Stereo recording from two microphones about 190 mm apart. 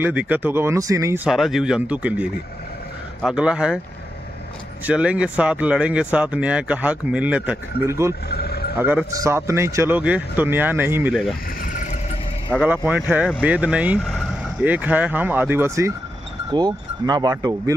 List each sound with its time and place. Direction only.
0.0 s speech: 10° right (ahead or behind)
1.3 s speech: centre (ahead or behind)
4.8 s speech: 5° right (ahead or behind)
8.3 s vehicle: 55° left (ahead or behind)
8.7 s speech: 10° right (ahead or behind)
11.6 s vehicle: 45° left (ahead or behind)
12.6 s speech: 10° right (ahead or behind)